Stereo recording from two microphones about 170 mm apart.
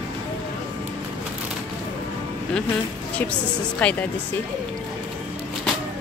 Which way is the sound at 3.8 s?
10° left (ahead or behind).